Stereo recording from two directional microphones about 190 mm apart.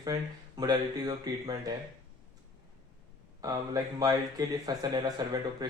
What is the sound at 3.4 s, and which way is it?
Speech, 20° right (ahead or behind).